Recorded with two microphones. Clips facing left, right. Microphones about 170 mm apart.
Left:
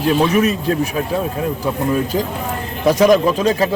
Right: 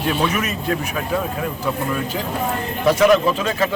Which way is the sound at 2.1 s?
35° left (ahead or behind).